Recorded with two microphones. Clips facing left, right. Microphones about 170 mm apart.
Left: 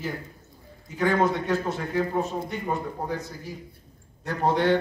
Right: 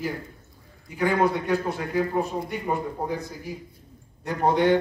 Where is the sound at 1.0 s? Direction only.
10° right (ahead or behind).